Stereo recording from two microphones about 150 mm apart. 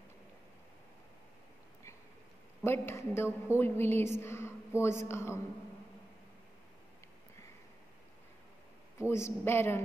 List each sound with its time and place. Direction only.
2.6 s a woman's voice: 15° left (ahead or behind)
8.9 s a woman's voice: 20° left (ahead or behind)